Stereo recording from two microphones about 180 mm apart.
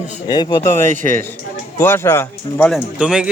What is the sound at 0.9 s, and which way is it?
Speech, 45° right (ahead or behind).